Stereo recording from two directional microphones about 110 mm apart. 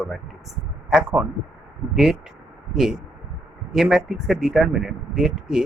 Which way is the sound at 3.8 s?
5° right (ahead or behind).